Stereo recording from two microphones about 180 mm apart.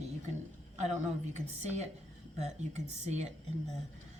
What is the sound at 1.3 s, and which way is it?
Speech, 40° right (ahead or behind).